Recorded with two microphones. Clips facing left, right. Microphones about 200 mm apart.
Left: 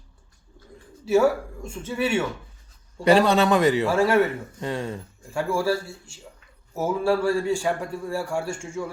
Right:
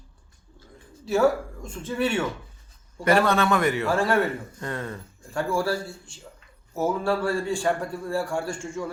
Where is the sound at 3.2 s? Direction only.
15° left (ahead or behind).